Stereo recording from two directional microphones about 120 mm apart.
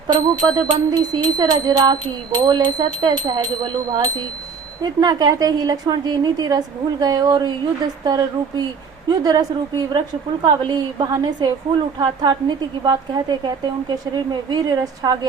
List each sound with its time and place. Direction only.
0.1 s a woman's voice: 35° right (ahead or behind)